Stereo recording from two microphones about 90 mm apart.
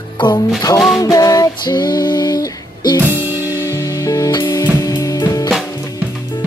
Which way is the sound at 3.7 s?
35° left (ahead or behind).